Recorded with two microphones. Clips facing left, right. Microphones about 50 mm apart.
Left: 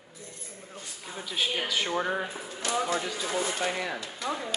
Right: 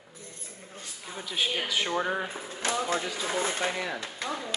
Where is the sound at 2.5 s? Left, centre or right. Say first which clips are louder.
Even; right.